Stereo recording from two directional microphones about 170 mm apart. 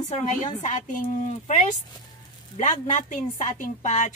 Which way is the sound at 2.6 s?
45° left (ahead or behind).